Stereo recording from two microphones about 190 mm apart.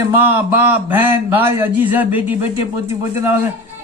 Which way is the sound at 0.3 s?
10° right (ahead or behind).